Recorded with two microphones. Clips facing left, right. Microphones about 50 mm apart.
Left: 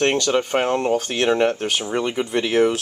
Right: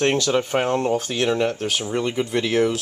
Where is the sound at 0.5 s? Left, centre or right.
Centre.